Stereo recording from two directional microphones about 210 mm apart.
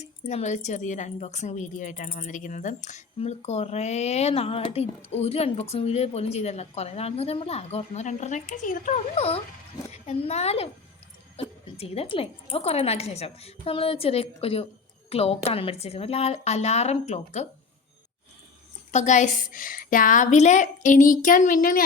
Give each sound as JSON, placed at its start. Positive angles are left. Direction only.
{"t": 0.0, "sound": "a woman's voice", "side_deg": 35}
{"t": 18.9, "sound": "a woman's voice", "side_deg": 35}